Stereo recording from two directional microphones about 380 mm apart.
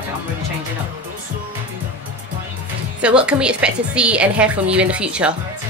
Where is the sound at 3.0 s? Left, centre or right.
Centre.